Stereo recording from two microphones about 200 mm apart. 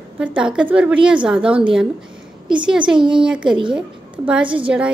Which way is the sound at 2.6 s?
5° right (ahead or behind).